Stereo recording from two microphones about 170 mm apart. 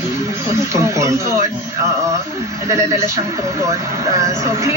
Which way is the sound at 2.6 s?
15° right (ahead or behind).